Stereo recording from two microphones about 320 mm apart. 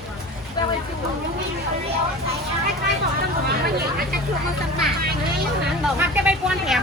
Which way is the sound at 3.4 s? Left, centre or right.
Right.